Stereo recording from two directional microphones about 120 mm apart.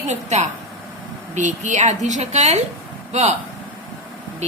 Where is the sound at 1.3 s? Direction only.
90° right; by 2.6 s 70° right (ahead or behind).